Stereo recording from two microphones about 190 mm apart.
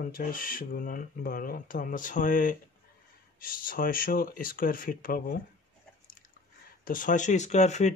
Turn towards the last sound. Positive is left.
turn(degrees=40)  # may be behind; listen again after turning